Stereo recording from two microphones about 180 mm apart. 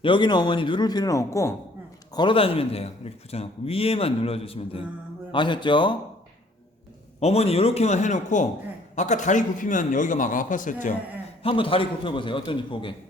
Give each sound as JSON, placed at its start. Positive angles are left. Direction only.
{"t": 0.0, "sound": "speech", "side_deg": 25}
{"t": 2.1, "sound": "speech", "side_deg": 30}
{"t": 7.2, "sound": "a man's voice", "side_deg": 35}
{"t": 11.4, "sound": "speech", "side_deg": 30}